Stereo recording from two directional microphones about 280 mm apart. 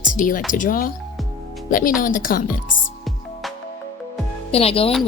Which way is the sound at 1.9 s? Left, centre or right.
Left.